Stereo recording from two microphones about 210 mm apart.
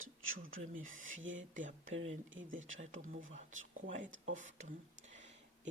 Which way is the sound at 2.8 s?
40° right (ahead or behind).